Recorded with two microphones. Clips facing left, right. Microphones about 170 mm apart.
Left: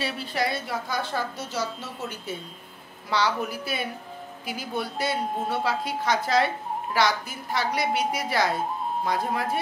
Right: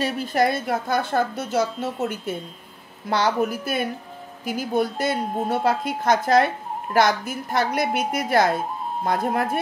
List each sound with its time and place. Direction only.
0.0 s a woman's voice: 45° right (ahead or behind)